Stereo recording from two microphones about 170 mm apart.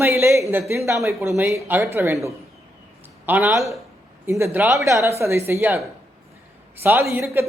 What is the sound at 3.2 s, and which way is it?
Speech, 10° right (ahead or behind).